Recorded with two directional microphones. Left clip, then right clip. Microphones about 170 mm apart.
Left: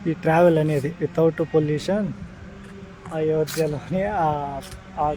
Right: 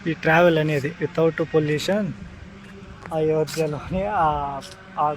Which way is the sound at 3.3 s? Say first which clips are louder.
Left 1 dB; 20° right (ahead or behind).